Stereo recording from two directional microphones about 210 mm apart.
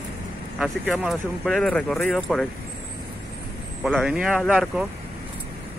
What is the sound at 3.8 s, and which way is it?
Speech, 5° right (ahead or behind).